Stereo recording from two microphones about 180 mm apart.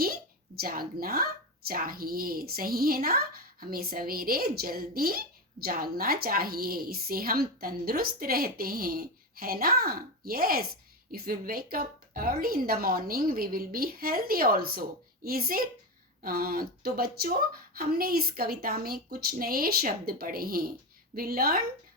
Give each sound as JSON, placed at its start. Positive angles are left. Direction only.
{"t": 0.6, "sound": "speech", "side_deg": -55}